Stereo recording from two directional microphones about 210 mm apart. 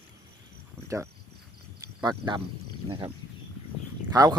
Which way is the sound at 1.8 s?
20° right (ahead or behind).